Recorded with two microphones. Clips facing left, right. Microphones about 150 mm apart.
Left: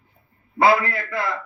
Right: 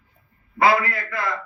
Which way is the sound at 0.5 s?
25° left (ahead or behind).